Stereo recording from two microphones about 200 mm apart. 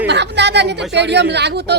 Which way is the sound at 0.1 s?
60° right (ahead or behind).